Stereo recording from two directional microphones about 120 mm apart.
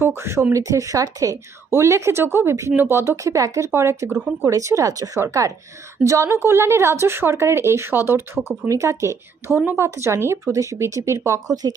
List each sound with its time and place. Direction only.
0.0 s speech: 20° right (ahead or behind)